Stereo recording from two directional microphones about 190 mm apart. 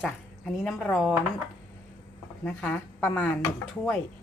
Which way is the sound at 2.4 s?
5° left (ahead or behind).